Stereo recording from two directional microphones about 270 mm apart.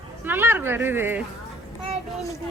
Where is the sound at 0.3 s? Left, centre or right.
Centre.